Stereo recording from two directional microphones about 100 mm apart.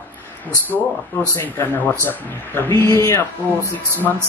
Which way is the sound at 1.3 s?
20° left (ahead or behind).